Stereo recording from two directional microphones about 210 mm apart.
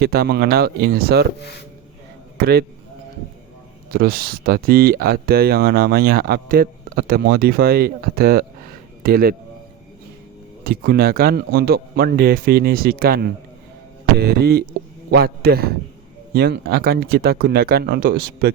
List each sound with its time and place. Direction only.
0.0 s speech: 50° right (ahead or behind)
2.4 s speech: 50° right (ahead or behind)
3.9 s speech: 45° right (ahead or behind)
10.6 s speech: 45° right (ahead or behind)